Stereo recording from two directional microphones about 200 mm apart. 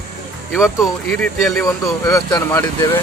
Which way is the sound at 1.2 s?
Centre (ahead or behind).